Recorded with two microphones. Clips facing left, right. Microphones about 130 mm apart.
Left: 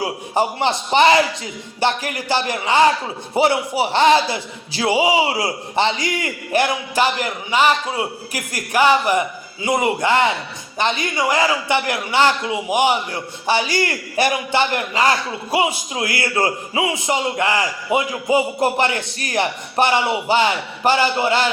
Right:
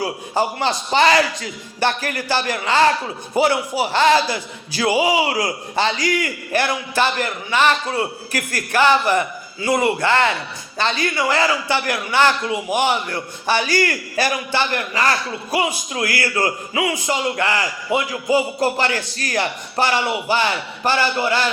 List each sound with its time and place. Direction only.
0.0 s a man's voice: 20° left (ahead or behind)